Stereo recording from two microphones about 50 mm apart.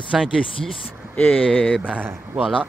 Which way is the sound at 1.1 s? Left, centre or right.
Left.